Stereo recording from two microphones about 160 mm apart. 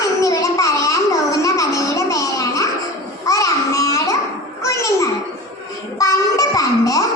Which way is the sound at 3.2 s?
20° left (ahead or behind).